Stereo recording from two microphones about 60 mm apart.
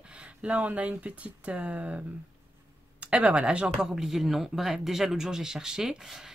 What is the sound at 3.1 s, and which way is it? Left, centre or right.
Speech, centre.